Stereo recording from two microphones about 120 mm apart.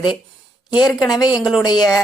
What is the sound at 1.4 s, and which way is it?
Speech, centre (ahead or behind).